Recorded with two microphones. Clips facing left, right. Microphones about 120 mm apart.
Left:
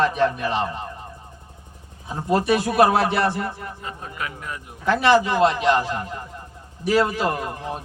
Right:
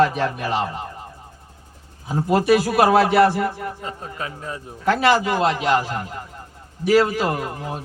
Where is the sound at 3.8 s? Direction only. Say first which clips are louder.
Right 1 dB; 30° right (ahead or behind).